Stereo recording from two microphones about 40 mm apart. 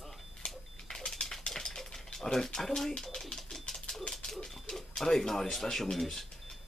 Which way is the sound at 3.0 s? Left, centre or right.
Centre.